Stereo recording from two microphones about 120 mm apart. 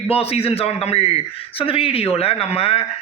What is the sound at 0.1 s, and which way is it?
A man's voice, 55° left (ahead or behind).